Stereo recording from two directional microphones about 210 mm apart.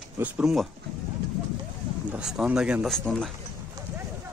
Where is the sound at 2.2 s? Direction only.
5° right (ahead or behind).